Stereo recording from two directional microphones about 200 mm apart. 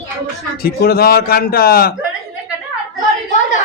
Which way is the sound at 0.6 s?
50° left (ahead or behind).